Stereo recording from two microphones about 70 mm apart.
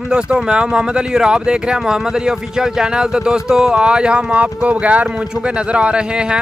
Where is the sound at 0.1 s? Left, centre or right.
Centre.